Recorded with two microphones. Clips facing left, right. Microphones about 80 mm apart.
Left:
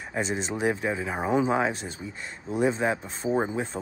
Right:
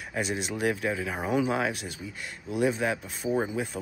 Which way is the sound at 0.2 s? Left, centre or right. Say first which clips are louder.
Left 2 dB; centre.